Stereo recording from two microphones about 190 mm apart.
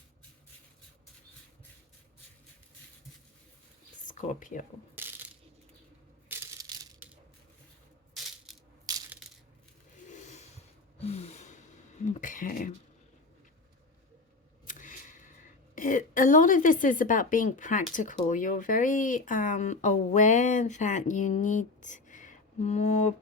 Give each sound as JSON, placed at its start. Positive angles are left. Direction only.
{"t": 4.1, "sound": "speech", "side_deg": 45}
{"t": 4.9, "sound": "crushing", "side_deg": -10}
{"t": 6.2, "sound": "crushing", "side_deg": -10}
{"t": 8.5, "sound": "coin", "side_deg": 0}
{"t": 8.9, "sound": "crushing", "side_deg": -20}
{"t": 10.1, "sound": "a sound", "side_deg": 40}
{"t": 11.0, "sound": "gasp", "side_deg": 35}
{"t": 12.0, "sound": "a sound", "side_deg": 40}
{"t": 14.7, "sound": "a sound", "side_deg": 45}
{"t": 15.7, "sound": "a woman's voice", "side_deg": 45}